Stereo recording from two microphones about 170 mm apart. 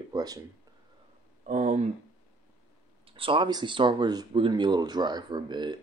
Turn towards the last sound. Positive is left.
turn(degrees=-25)  # may be behind; listen again after turning